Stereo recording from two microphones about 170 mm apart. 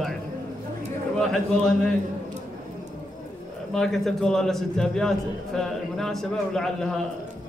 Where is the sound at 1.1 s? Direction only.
5° left (ahead or behind).